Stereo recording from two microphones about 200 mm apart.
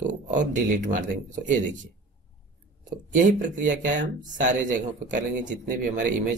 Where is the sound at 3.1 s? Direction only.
40° right (ahead or behind).